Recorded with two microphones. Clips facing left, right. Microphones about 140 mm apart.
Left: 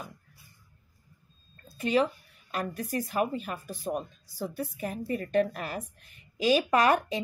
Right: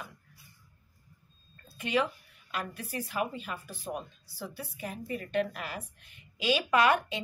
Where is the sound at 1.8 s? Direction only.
40° left (ahead or behind).